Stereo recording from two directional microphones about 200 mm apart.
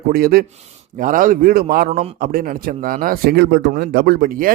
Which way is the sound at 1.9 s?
30° right (ahead or behind).